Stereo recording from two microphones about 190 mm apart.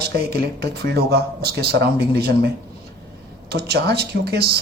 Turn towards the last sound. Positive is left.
turn(degrees=-60)  # may be behind; listen again after turning